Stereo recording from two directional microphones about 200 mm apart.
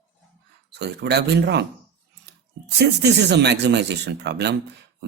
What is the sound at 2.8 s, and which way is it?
Speech, 60° right (ahead or behind).